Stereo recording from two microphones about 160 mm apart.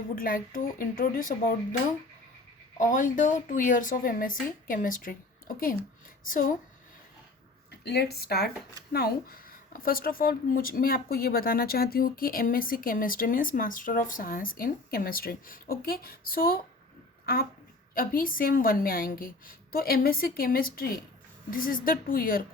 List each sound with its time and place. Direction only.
0.2 s speech: 60° left (ahead or behind)
2.7 s speech: 55° left (ahead or behind)
7.7 s speech: 90° left; by 22.4 s 65° left (ahead or behind)